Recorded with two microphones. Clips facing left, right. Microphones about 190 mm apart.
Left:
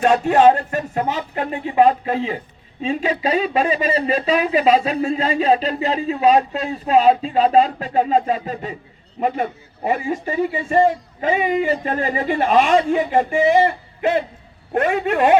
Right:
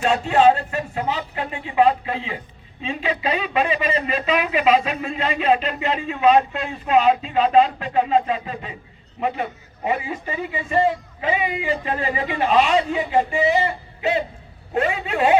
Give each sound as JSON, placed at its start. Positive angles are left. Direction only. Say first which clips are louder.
{"t": 0.0, "sound": "a man's voice", "louder": "left 3 dB", "side_deg": 50}